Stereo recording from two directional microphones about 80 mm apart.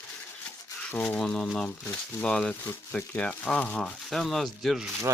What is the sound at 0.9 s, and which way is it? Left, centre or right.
Speech, centre.